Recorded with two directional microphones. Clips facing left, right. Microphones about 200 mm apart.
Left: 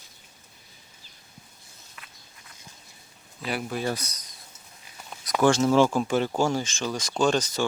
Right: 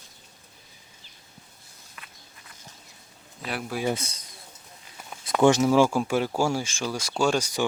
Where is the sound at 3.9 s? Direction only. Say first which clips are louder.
Right 3 dB; 25° right (ahead or behind).